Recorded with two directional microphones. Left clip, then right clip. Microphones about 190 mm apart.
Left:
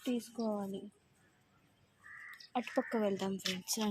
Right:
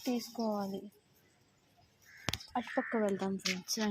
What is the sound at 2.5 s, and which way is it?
Speech, 15° left (ahead or behind).